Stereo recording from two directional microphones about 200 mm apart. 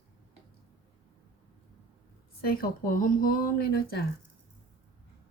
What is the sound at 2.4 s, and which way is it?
Speech, 45° left (ahead or behind).